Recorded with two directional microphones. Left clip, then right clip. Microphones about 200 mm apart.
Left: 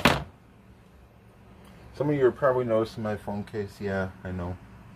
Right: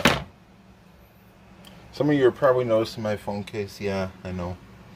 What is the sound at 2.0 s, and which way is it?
Speech, 30° right (ahead or behind).